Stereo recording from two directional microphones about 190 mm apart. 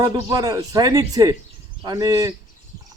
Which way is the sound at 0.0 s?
20° right (ahead or behind).